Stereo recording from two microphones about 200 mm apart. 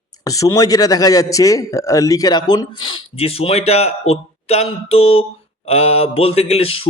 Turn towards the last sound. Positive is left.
turn(degrees=30)  # may be behind; listen again after turning